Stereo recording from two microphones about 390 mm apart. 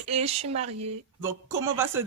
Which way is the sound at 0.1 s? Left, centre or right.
Centre.